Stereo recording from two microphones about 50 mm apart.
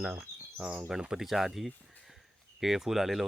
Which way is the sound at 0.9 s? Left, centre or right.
Centre.